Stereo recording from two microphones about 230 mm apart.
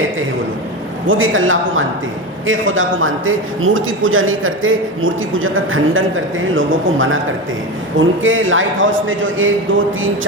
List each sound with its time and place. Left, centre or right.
1.0 s a man's voice: right